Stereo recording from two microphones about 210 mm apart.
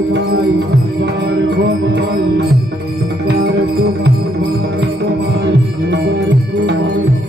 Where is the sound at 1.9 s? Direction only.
55° right (ahead or behind).